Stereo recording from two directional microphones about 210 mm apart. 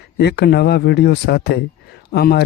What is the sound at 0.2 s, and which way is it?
Speech, 50° left (ahead or behind).